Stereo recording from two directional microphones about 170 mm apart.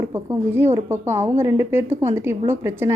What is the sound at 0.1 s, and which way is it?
A woman's voice, 15° right (ahead or behind).